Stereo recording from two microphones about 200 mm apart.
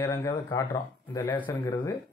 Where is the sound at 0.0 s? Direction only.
20° left (ahead or behind).